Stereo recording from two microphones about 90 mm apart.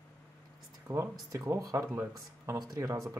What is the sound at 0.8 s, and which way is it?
Speech, 30° right (ahead or behind).